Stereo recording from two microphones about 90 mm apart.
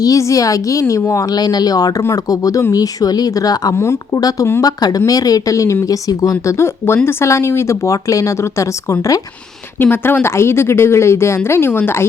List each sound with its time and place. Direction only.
0.0 s speech: 40° left (ahead or behind)
1.4 s speech: 45° left (ahead or behind)
3.8 s speech: 30° left (ahead or behind)
4.6 s speech: 45° left (ahead or behind)
6.8 s speech: 25° left (ahead or behind)
9.8 s speech: 25° left (ahead or behind)